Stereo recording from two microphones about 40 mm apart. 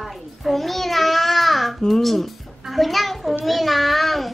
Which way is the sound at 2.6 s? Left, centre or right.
Centre.